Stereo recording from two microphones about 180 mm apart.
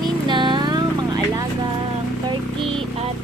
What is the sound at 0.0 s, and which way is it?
Vehicle, 25° right (ahead or behind).